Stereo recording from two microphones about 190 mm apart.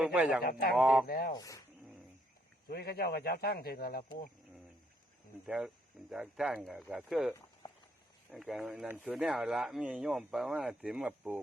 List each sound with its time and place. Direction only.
0.0 s speech: 5° right (ahead or behind)
1.0 s speech: 55° left (ahead or behind)
1.3 s speech: 20° left (ahead or behind)
2.6 s a man's voice: 55° left (ahead or behind)
5.5 s speech: centre (ahead or behind)